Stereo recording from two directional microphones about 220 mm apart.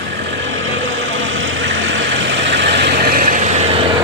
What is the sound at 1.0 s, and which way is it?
Vehicle, 60° right (ahead or behind).